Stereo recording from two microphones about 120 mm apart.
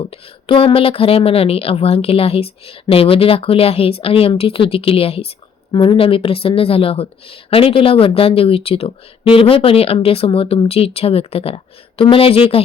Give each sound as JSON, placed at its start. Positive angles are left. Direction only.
{"t": 0.1, "sound": "a woman's voice", "side_deg": 50}
{"t": 5.7, "sound": "a woman's voice", "side_deg": 45}